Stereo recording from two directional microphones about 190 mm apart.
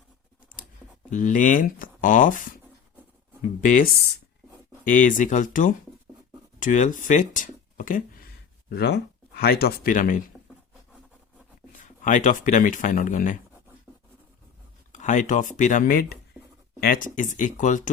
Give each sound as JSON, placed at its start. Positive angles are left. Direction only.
{"t": 1.1, "sound": "speech", "side_deg": 40}
{"t": 4.9, "sound": "speech", "side_deg": 45}
{"t": 8.7, "sound": "speech", "side_deg": 60}
{"t": 11.8, "sound": "speech", "side_deg": 45}
{"t": 14.9, "sound": "speech", "side_deg": 40}